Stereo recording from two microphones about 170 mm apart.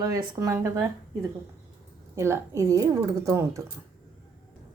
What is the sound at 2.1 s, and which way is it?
A woman's voice, 15° right (ahead or behind).